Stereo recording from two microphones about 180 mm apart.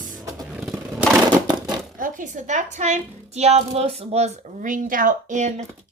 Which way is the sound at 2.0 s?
45° right (ahead or behind).